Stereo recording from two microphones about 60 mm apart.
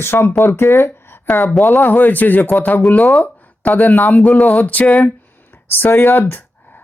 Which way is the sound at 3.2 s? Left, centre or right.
Left.